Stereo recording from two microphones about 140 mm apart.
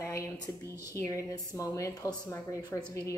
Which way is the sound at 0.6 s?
20° right (ahead or behind).